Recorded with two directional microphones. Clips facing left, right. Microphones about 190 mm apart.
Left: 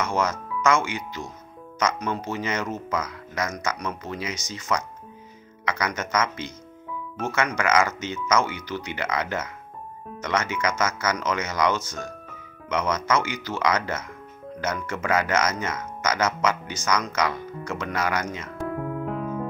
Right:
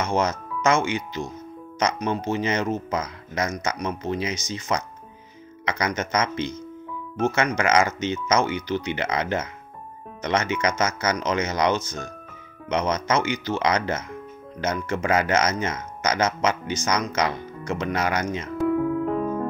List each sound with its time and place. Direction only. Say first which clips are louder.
0.0 s speech: right 2 dB; 25° right (ahead or behind)
19.0 s electric piano: right 5 dB; centre (ahead or behind)